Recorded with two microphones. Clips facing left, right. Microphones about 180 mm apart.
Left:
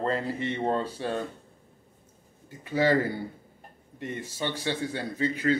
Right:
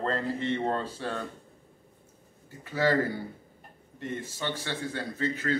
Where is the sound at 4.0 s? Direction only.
15° left (ahead or behind).